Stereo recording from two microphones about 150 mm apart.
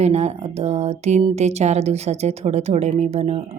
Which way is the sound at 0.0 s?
45° right (ahead or behind).